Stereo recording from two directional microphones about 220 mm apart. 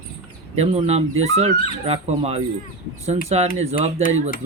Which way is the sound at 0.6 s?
25° right (ahead or behind).